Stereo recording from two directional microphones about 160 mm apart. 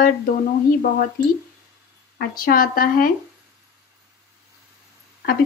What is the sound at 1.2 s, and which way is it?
A woman's voice, 65° left (ahead or behind).